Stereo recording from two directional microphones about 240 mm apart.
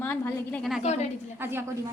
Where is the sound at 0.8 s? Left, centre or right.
Left.